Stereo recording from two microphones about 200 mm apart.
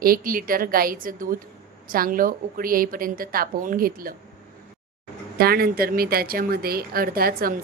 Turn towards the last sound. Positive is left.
turn(degrees=-45)  # may be behind; listen again after turning